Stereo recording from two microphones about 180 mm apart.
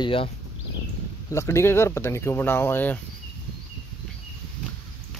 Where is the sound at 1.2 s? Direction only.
15° left (ahead or behind).